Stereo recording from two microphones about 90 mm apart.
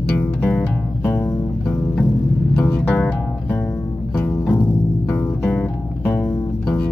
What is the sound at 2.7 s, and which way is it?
Music, 20° left (ahead or behind).